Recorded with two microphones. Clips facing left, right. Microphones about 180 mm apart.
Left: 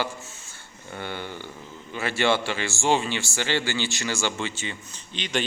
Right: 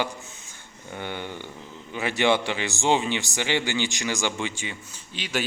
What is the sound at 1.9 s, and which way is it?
A man's voice, 15° right (ahead or behind).